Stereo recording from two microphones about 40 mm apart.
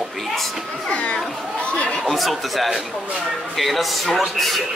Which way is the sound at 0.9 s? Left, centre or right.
Left.